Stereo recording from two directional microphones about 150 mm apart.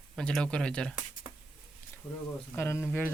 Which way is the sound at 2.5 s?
15° left (ahead or behind).